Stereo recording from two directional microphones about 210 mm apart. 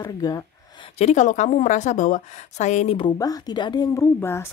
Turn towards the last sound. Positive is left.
turn(degrees=10)  # may be behind; listen again after turning